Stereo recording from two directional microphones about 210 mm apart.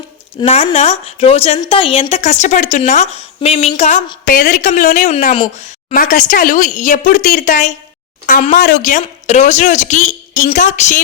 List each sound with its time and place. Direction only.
0.4 s a woman's voice: 30° left (ahead or behind)